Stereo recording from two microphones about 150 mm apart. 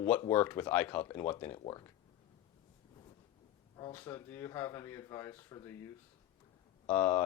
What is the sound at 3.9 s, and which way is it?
Speech, 15° left (ahead or behind).